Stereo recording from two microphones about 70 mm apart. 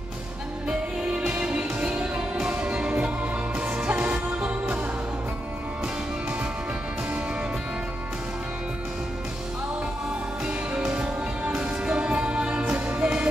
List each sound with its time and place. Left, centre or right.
0.7 s music: centre
10.4 s music: centre